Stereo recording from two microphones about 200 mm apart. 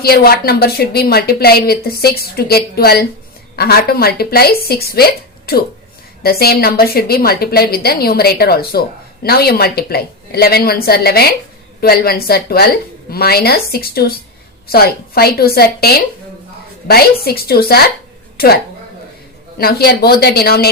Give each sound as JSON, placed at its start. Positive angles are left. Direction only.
{"t": 0.0, "sound": "a woman's voice", "side_deg": 50}
{"t": 17.2, "sound": "a woman's voice", "side_deg": 50}